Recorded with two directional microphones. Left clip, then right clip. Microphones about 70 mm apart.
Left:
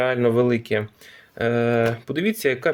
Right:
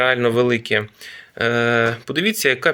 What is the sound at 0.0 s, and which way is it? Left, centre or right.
Speech, left.